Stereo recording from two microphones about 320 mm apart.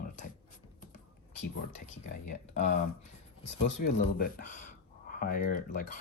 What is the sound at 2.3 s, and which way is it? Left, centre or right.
Speech, left.